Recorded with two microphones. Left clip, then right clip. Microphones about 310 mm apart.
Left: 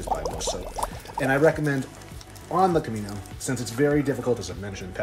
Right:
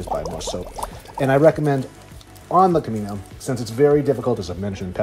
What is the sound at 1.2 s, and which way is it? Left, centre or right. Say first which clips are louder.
Speech: right 6 dB; centre.